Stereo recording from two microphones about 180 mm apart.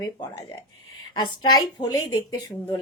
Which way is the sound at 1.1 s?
25° left (ahead or behind).